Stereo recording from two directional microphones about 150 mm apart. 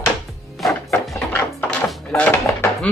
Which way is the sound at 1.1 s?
15° left (ahead or behind).